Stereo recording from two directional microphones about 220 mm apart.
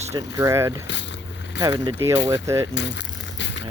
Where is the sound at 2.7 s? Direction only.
55° left (ahead or behind).